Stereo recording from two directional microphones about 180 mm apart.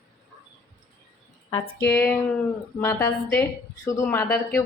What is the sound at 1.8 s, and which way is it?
Speech, 10° left (ahead or behind).